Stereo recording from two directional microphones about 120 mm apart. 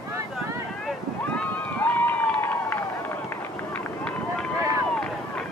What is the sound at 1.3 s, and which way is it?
Run, 15° left (ahead or behind).